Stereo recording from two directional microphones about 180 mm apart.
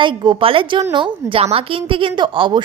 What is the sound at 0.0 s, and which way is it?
A woman's voice, 30° right (ahead or behind).